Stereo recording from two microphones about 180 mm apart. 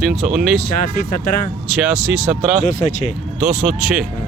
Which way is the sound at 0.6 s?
50° left (ahead or behind).